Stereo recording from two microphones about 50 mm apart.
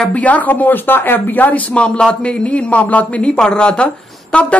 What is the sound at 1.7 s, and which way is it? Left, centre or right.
A woman's voice, centre.